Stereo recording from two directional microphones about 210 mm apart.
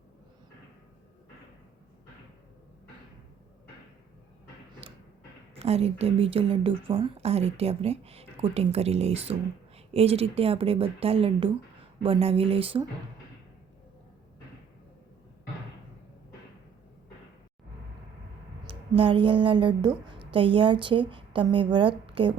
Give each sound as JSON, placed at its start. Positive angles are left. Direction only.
{"t": 4.8, "sound": "a sound", "side_deg": -30}
{"t": 5.5, "sound": "a woman's voice", "side_deg": -30}
{"t": 18.7, "sound": "a woman's voice", "side_deg": -25}